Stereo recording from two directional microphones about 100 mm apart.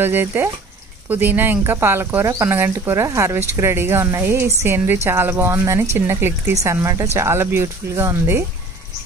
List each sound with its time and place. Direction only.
0.0 s a woman's voice: 20° right (ahead or behind)